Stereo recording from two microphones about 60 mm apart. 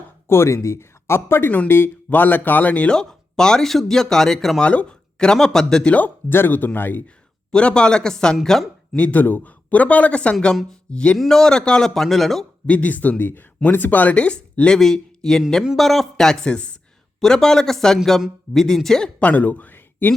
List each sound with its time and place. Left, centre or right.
0.3 s speech: left
2.9 s speech: centre
4.6 s speech: centre
6.2 s speech: left
7.5 s speech: centre
9.0 s speech: left
11.2 s speech: centre
12.6 s speech: left; by 19.1 s centre
19.2 s speech: left